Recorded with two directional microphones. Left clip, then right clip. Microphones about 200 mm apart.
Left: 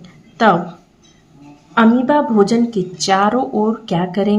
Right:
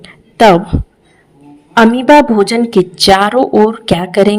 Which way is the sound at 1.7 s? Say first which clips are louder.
Right 7 dB; 50° right (ahead or behind).